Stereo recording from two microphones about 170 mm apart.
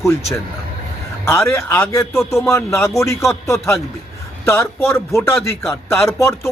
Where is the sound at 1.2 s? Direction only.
15° left (ahead or behind).